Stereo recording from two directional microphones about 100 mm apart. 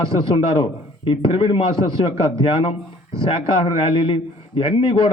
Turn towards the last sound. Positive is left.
turn(degrees=55)  # may be behind; listen again after turning